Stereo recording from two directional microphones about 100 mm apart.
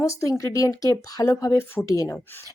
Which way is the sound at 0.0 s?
30° left (ahead or behind).